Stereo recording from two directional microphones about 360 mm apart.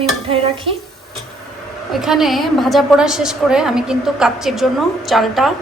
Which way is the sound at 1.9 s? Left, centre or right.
Centre.